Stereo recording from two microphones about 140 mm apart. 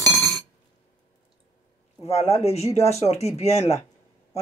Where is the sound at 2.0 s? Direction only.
50° left (ahead or behind).